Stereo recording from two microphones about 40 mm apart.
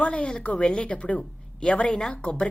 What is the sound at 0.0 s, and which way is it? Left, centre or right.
A woman's voice, left.